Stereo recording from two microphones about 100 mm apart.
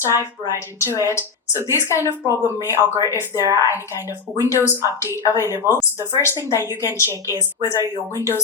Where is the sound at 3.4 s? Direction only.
35° right (ahead or behind).